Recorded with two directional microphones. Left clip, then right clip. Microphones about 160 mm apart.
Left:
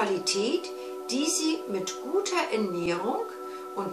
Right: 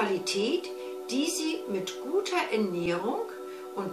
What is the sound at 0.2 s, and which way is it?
Speech, 10° right (ahead or behind).